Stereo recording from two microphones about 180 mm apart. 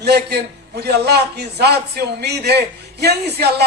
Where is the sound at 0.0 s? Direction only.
65° right (ahead or behind).